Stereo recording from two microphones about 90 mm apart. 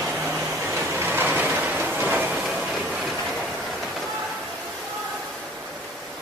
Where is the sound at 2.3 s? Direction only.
10° right (ahead or behind).